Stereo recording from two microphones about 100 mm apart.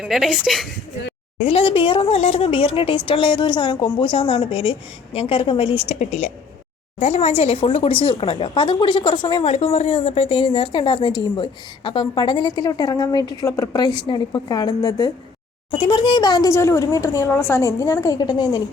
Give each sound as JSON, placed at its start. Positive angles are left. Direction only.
{"t": 0.0, "sound": "speech", "side_deg": -5}
{"t": 1.5, "sound": "a woman's voice", "side_deg": 60}
{"t": 9.7, "sound": "a woman's voice", "side_deg": 80}
{"t": 15.7, "sound": "speech", "side_deg": 55}
{"t": 16.5, "sound": "a woman's voice", "side_deg": 30}
{"t": 18.2, "sound": "speech", "side_deg": 40}